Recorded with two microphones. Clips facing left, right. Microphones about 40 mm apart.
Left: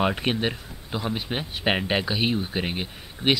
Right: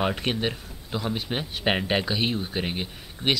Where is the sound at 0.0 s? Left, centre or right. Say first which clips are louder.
Left 2 dB; centre.